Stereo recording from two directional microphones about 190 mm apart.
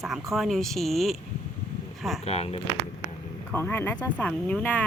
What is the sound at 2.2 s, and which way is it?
Speech, 30° left (ahead or behind).